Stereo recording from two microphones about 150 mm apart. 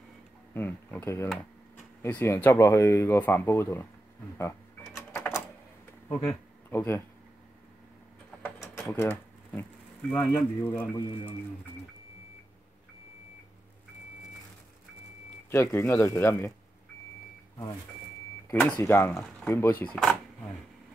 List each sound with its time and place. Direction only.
0.6 s speech: 15° left (ahead or behind)
5.1 s typewriter: 15° left (ahead or behind)
6.0 s a sound: 20° left (ahead or behind)
8.4 s sewing machine: 15° left (ahead or behind)
15.5 s speech: 15° left (ahead or behind)
18.5 s speech: 10° left (ahead or behind)